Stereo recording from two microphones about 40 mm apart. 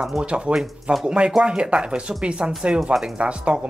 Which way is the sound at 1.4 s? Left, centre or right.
Right.